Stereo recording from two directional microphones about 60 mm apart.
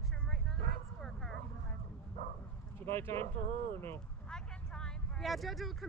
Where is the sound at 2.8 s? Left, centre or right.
Left.